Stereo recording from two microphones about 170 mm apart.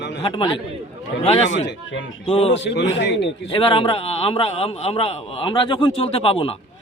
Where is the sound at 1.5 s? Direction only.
90° left.